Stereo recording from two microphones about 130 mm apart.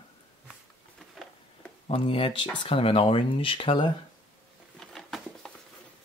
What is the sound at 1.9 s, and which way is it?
Speech, 45° left (ahead or behind).